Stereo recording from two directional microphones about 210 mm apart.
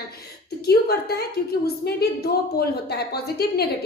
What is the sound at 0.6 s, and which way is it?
A woman's voice, 50° left (ahead or behind).